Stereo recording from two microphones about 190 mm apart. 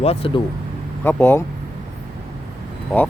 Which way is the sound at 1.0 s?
10° left (ahead or behind).